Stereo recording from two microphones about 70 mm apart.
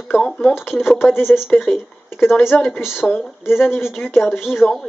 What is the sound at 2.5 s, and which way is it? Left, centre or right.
Speech, centre.